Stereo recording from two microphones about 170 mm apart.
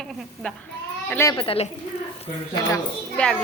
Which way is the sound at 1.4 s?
35° left (ahead or behind).